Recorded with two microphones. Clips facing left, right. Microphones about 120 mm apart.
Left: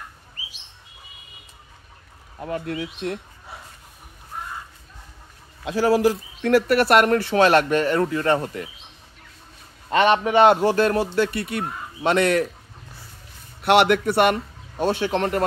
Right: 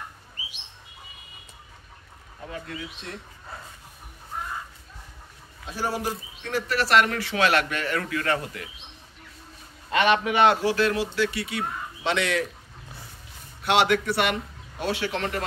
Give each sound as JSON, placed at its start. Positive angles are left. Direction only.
{"t": 2.5, "sound": "a man's voice", "side_deg": 55}
{"t": 5.7, "sound": "speech", "side_deg": 90}
{"t": 9.8, "sound": "speech", "side_deg": 35}
{"t": 13.6, "sound": "a man's voice", "side_deg": 60}
{"t": 14.8, "sound": "speech", "side_deg": 40}